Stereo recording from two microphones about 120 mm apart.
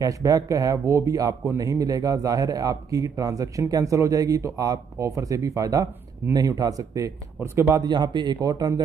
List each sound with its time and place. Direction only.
0.0 s speech: 30° right (ahead or behind)